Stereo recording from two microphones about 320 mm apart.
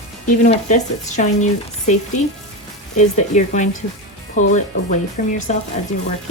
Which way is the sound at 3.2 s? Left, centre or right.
Left.